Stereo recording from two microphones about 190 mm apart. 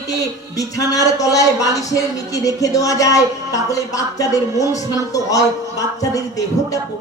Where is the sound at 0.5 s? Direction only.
20° left (ahead or behind).